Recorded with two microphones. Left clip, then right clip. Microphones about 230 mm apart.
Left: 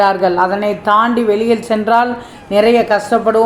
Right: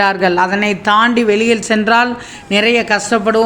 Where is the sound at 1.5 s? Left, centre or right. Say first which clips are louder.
Even; right.